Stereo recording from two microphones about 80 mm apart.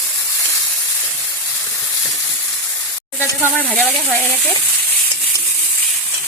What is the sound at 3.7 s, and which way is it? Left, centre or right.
Speech, centre.